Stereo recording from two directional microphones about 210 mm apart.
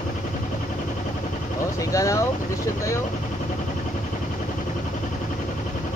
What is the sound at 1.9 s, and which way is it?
Speech, 15° left (ahead or behind).